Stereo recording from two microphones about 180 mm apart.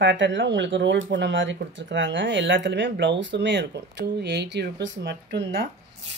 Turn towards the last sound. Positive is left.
turn(degrees=-70)  # may be behind; listen again after turning